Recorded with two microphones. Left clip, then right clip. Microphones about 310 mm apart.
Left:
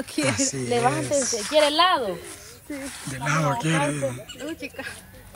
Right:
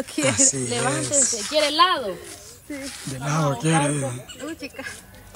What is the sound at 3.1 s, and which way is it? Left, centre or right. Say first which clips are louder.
Speech: left 1 dB; centre.